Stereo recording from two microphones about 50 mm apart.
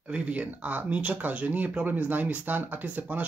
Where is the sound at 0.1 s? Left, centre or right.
Right.